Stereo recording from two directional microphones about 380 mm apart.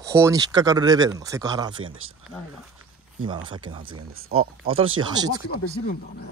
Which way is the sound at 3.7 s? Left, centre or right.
Centre.